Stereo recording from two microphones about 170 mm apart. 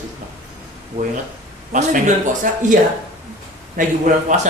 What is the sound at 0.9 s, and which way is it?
Speech, 35° right (ahead or behind).